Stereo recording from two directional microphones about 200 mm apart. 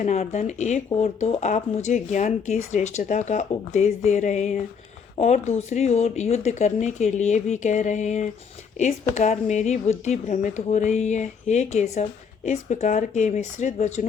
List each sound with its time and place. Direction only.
0.0 s speech: 35° left (ahead or behind)